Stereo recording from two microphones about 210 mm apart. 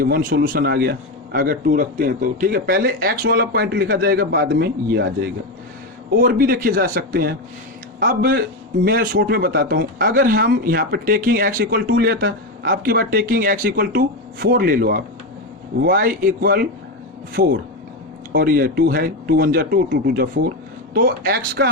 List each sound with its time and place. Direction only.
0.0 s speech: 45° right (ahead or behind)